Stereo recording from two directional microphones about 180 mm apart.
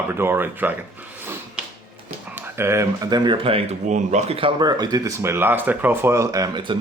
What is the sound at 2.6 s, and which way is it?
Speech, 15° right (ahead or behind).